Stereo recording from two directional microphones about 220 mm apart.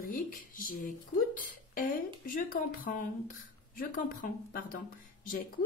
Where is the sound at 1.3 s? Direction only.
40° left (ahead or behind).